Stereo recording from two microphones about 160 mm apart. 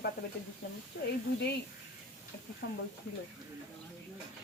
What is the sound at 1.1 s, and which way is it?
Speech, 90° left.